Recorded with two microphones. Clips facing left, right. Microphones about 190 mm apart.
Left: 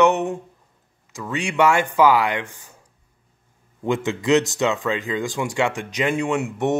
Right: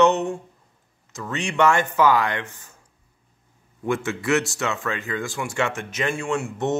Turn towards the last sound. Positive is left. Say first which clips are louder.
# left 2 dB
turn(degrees=15)  # may be behind; listen again after turning